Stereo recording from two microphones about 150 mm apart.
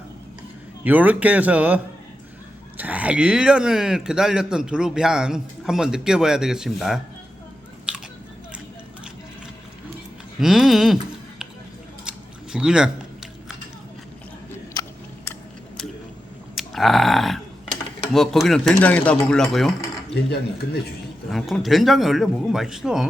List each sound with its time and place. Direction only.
0.9 s a man's voice: 10° right (ahead or behind)
10.4 s speech: centre (ahead or behind)
12.0 s a sound: 5° right (ahead or behind)
14.7 s biting: 20° left (ahead or behind)
16.6 s a sound: centre (ahead or behind)
18.1 s speech: centre (ahead or behind)
21.2 s speech: centre (ahead or behind)